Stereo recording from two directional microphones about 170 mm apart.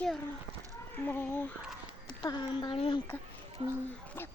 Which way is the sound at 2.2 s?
25° left (ahead or behind).